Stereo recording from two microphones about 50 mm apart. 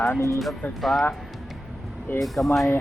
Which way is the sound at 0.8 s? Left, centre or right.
Centre.